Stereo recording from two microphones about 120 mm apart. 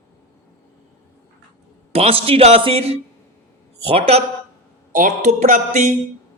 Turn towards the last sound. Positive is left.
turn(degrees=-85)